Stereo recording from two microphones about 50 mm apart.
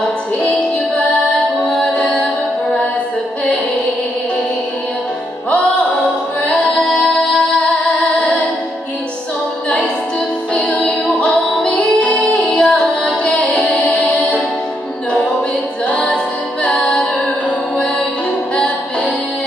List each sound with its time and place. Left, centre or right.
0.5 s music: left
1.6 s music: centre
6.7 s music: centre
10.5 s music: left
12.2 s music: centre
13.2 s music: left
14.0 s music: centre
15.9 s music: centre
17.7 s music: centre